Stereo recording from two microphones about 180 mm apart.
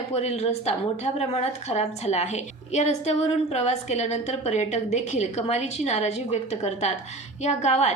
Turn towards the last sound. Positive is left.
turn(degrees=40)  # may be behind; listen again after turning